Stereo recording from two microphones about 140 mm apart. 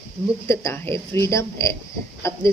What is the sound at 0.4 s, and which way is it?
A woman's voice, 20° left (ahead or behind).